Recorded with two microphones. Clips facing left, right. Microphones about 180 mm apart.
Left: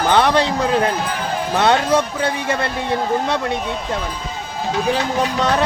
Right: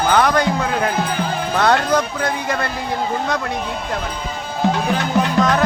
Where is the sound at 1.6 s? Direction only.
25° left (ahead or behind).